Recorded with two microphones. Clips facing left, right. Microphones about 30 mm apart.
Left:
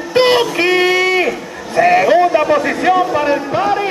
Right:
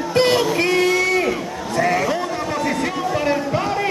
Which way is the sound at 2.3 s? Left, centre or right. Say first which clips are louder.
Left 11 dB; left.